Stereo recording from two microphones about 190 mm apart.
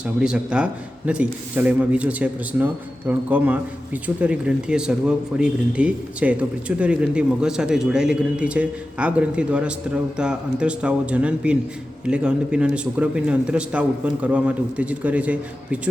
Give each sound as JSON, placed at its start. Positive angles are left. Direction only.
{"t": 0.0, "sound": "a man's voice", "side_deg": -5}